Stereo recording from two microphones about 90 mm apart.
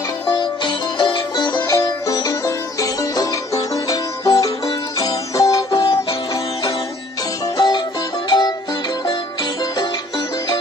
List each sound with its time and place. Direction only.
0.3 s music: 60° left (ahead or behind); by 5.9 s 40° left (ahead or behind)
7.5 s music: 50° left (ahead or behind)